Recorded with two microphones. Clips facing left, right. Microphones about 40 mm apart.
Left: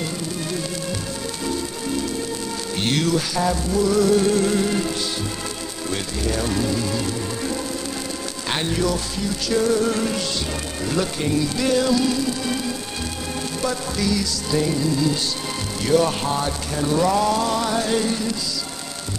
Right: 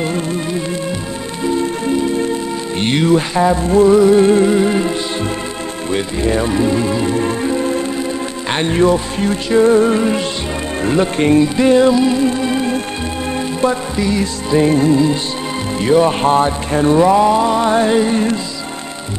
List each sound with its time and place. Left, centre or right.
1.4 s music: right
15.8 s music: right